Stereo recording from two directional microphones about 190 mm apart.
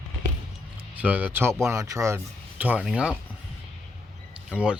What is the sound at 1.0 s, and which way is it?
Speech, 10° right (ahead or behind).